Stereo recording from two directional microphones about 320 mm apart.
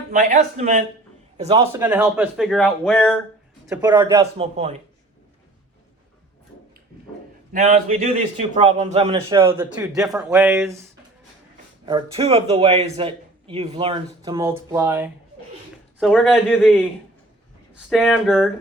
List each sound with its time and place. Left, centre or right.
0.1 s a man's voice: right
1.7 s speech: centre
3.7 s a man's voice: centre
7.5 s a man's voice: right
9.6 s a man's voice: centre
11.9 s a man's voice: centre